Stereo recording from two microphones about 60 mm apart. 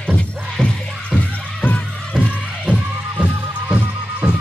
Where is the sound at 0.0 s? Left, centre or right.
Centre.